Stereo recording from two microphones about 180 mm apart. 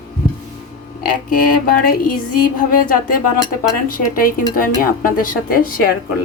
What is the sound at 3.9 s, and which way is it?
Speech, 50° left (ahead or behind).